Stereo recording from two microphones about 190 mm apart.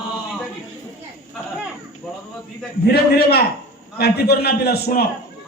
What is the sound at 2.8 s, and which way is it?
A man's voice, 55° left (ahead or behind).